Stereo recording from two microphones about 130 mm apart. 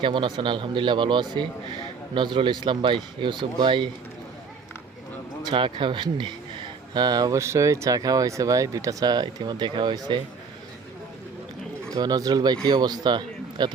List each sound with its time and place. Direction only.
0.0 s speech: 40° right (ahead or behind)
5.5 s speech: 40° right (ahead or behind)
11.9 s a man's voice: 30° right (ahead or behind)